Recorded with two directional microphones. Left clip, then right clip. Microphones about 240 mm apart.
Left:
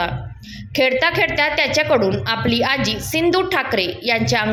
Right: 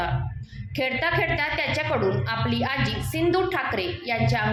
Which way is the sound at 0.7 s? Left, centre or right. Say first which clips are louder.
Left 8 dB; left.